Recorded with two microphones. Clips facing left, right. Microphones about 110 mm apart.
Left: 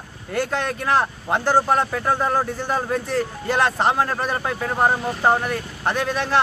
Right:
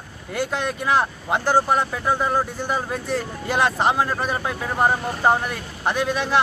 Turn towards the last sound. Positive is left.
turn(degrees=-5)  # may be behind; listen again after turning